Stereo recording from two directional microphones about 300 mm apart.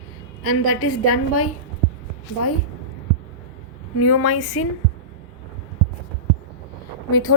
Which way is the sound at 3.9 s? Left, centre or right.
Left.